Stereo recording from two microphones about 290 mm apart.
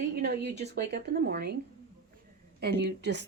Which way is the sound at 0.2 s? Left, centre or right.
Right.